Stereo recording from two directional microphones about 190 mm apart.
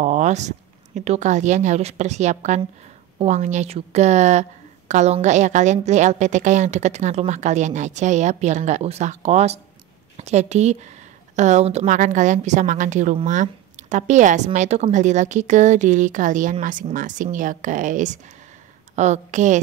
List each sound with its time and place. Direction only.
0.0 s a woman's voice: 40° right (ahead or behind)